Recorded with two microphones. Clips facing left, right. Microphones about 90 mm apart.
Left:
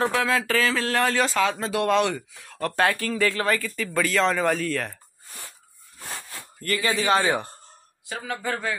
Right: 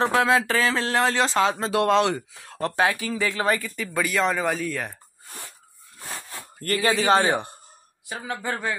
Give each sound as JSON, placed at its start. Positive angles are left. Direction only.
{"t": 0.2, "sound": "speech", "side_deg": -25}
{"t": 2.8, "sound": "speech", "side_deg": -5}
{"t": 3.1, "sound": "speech", "side_deg": -15}
{"t": 6.6, "sound": "a man's voice", "side_deg": -40}